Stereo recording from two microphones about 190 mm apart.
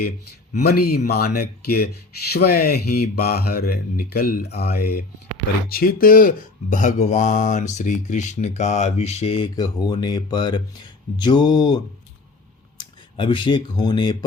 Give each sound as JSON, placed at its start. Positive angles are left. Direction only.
{"t": 0.6, "sound": "speech", "side_deg": 55}
{"t": 11.2, "sound": "a sound", "side_deg": 20}
{"t": 12.7, "sound": "speech", "side_deg": 25}